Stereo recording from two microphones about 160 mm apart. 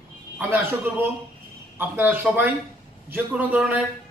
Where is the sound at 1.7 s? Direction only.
15° right (ahead or behind).